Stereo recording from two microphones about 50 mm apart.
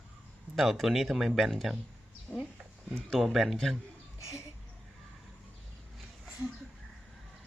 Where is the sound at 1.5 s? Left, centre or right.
Centre.